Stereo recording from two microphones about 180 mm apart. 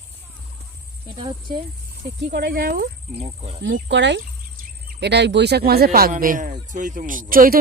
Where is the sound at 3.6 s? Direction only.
80° right.